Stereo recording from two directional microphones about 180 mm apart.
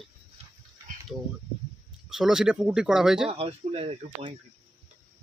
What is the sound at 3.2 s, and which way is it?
Speech, 35° right (ahead or behind).